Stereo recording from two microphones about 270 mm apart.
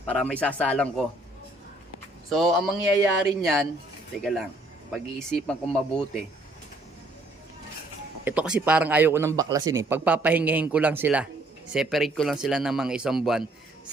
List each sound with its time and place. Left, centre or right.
0.0 s speech: centre
2.3 s speech: centre
8.2 s speech: centre